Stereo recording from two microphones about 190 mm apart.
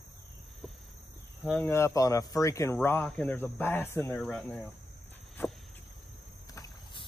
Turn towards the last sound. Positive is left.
turn(degrees=20)  # may be behind; listen again after turning